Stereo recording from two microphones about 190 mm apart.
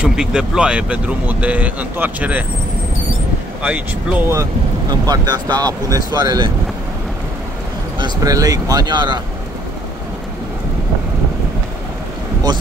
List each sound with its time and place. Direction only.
0.0 s speech: 5° right (ahead or behind)
3.6 s speech: 10° right (ahead or behind)
8.0 s speech: 20° right (ahead or behind)